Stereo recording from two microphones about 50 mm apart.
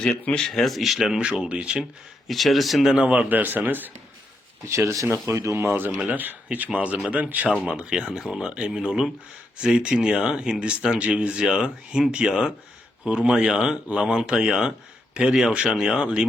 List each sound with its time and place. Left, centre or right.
0.0 s speech: centre
1.2 s speech: centre
1.8 s speech: centre
2.9 s a man's voice: right
5.0 s speech: right
6.1 s a man's voice: right
7.6 s speech: centre